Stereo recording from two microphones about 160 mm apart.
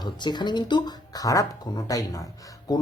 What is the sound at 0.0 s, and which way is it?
Speech, 25° left (ahead or behind).